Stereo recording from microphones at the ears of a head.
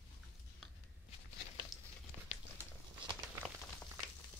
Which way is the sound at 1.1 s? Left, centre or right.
Left.